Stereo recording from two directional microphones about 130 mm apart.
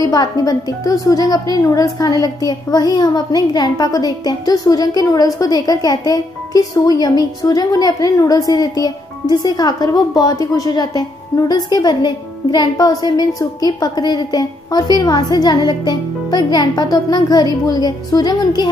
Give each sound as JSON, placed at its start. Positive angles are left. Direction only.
{"t": 0.0, "sound": "a woman's voice", "side_deg": 30}